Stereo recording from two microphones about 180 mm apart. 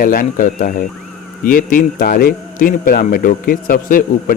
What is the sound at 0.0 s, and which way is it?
A man's voice, 50° left (ahead or behind).